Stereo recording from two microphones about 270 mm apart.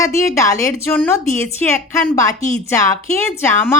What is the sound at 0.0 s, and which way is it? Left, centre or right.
Speech, centre.